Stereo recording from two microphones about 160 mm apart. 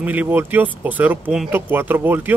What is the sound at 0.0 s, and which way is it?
Speech, 10° right (ahead or behind).